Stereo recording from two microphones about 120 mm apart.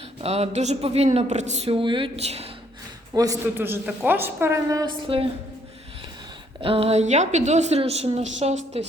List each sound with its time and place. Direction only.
0.2 s a woman's voice: 60° right (ahead or behind)
1.7 s speech: 45° right (ahead or behind)
2.2 s a woman's voice: 60° right (ahead or behind)
3.4 s a woman's voice: 20° right (ahead or behind)
5.0 s speech: 50° right (ahead or behind)
6.6 s a woman's voice: 50° right (ahead or behind)